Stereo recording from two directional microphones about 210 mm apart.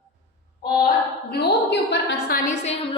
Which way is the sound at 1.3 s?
50° left (ahead or behind).